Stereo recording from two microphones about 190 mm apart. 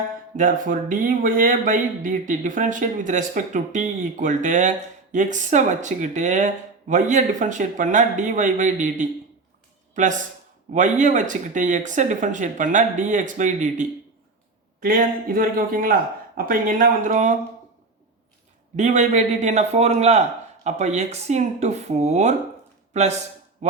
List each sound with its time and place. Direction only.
0.3 s speech: 45° right (ahead or behind)
18.8 s speech: 40° right (ahead or behind)